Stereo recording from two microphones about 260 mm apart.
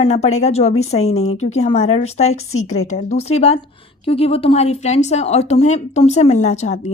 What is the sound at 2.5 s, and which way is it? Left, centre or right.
Speech, left.